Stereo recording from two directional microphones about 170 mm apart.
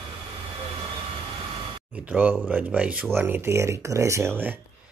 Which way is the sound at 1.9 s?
10° right (ahead or behind).